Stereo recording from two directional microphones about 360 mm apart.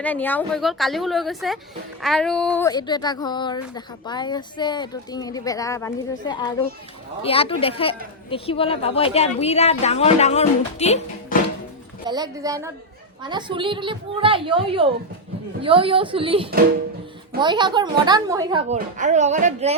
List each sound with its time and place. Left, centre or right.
0.0 s a woman's voice: centre
12.0 s a woman's voice: centre